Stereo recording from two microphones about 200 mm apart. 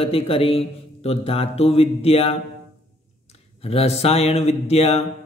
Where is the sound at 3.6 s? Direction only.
30° left (ahead or behind).